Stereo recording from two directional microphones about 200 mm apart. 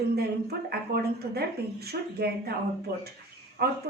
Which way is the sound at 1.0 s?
55° right (ahead or behind).